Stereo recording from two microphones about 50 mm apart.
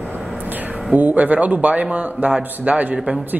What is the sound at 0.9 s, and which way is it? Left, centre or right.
Speech, right.